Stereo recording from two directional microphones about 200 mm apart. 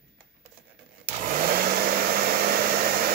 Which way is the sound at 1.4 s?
45° right (ahead or behind).